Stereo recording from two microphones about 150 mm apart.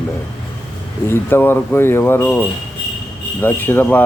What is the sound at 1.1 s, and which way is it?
Speech, 15° left (ahead or behind).